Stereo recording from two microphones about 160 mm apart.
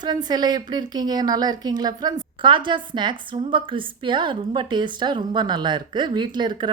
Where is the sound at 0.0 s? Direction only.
25° right (ahead or behind).